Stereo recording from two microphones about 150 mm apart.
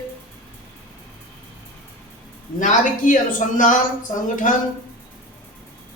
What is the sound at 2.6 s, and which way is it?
Speech, 60° left (ahead or behind).